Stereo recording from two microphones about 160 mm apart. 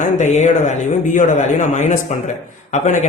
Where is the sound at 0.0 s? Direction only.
50° left (ahead or behind).